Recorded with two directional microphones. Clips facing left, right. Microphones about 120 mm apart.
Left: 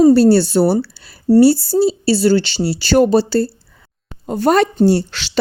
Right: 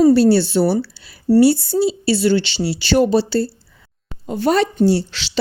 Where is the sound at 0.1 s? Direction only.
40° left (ahead or behind).